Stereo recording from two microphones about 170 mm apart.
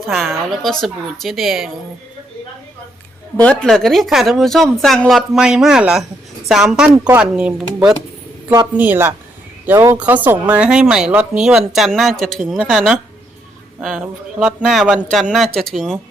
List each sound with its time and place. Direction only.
0.1 s speech: centre (ahead or behind)
3.4 s speech: 5° left (ahead or behind)